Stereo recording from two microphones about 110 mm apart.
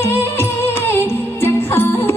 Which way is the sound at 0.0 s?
20° left (ahead or behind).